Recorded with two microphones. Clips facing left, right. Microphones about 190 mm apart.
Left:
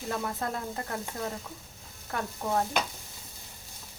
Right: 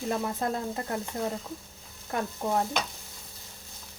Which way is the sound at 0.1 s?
20° right (ahead or behind).